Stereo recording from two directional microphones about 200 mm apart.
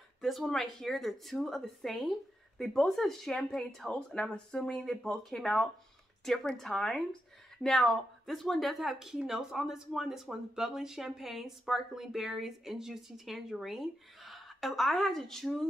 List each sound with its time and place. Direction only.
0.2 s speech: centre (ahead or behind)